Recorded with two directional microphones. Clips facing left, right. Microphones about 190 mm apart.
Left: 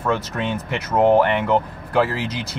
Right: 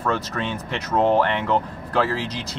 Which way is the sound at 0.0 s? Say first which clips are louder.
Left 2 dB; 15° left (ahead or behind).